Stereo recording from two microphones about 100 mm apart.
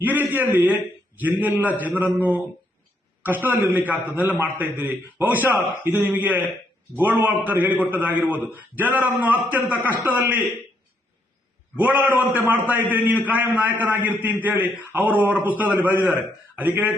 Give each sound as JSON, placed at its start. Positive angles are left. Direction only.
{"t": 0.0, "sound": "a man's voice", "side_deg": -20}
{"t": 11.9, "sound": "a man's voice", "side_deg": 25}
{"t": 12.3, "sound": "a man's voice", "side_deg": -15}